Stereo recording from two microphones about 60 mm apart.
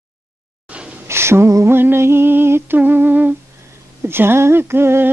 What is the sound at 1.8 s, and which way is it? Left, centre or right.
Music, right.